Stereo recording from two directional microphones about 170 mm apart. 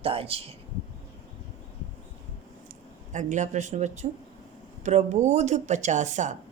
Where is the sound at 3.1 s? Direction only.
45° right (ahead or behind).